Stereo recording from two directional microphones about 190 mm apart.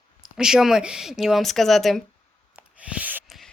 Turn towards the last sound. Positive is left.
turn(degrees=-10)  # may be behind; listen again after turning